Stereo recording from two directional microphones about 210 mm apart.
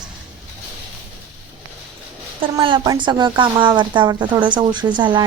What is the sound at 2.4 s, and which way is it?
A woman's voice, 25° right (ahead or behind).